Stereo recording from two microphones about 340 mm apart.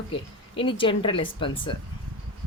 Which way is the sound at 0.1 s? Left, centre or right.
Centre.